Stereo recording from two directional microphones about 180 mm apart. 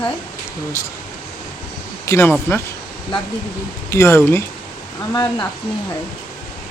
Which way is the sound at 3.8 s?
15° left (ahead or behind).